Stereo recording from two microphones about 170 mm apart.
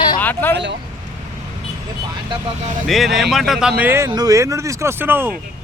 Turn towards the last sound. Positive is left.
turn(degrees=-15)  # may be behind; listen again after turning